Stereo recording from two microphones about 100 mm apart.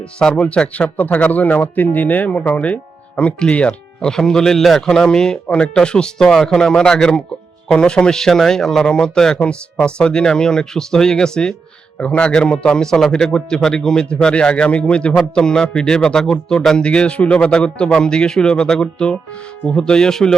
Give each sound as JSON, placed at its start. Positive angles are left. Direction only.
{"t": 0.2, "sound": "a man's voice", "side_deg": 10}